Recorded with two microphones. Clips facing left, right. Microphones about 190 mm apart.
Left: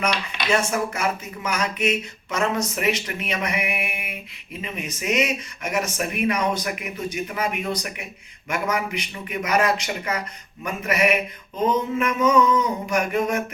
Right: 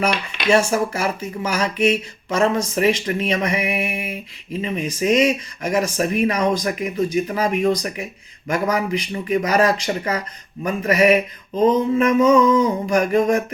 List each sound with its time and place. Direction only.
0.5 s speech: 30° right (ahead or behind)